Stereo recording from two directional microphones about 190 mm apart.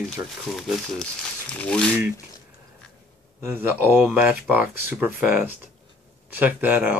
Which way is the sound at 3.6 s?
10° right (ahead or behind).